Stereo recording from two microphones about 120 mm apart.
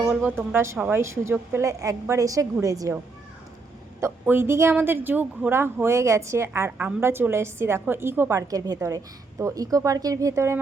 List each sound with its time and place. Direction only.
0.1 s a woman's voice: 10° right (ahead or behind); by 2.9 s 30° right (ahead or behind)
4.0 s speech: 20° right (ahead or behind)